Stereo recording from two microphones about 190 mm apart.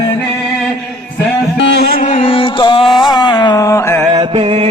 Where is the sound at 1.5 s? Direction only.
65° left (ahead or behind); by 2.9 s 25° left (ahead or behind).